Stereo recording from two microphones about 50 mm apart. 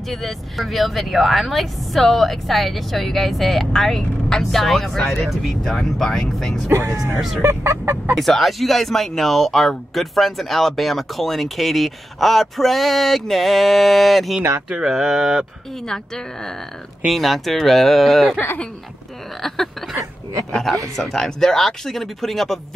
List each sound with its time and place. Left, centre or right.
0.1 s speech: centre
6.7 s speech: right
7.2 s speech: centre
7.4 s speech: right
8.1 s speech: centre
14.7 s mantra: centre
15.8 s a woman's voice: centre
17.1 s speech: centre
19.4 s speech: centre